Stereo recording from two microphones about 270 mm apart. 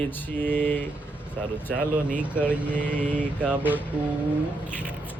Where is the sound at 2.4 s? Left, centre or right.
Centre.